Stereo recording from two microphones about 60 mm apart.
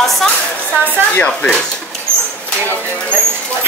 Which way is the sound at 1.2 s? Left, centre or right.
Centre.